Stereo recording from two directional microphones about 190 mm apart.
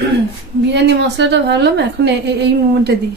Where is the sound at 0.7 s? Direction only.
65° right (ahead or behind).